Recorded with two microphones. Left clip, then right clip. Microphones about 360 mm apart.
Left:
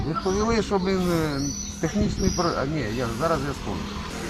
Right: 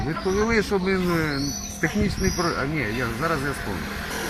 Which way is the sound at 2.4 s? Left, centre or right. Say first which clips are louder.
Left 1 dB; centre.